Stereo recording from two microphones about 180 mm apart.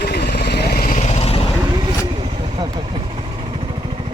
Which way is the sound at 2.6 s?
25° right (ahead or behind).